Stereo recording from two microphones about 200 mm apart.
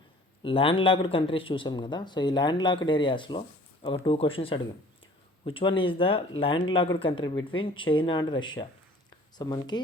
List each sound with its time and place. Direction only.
0.4 s speech: 25° left (ahead or behind)